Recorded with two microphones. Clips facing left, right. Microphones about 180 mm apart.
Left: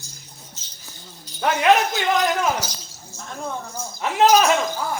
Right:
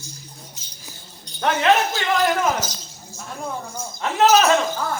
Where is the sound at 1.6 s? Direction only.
20° left (ahead or behind).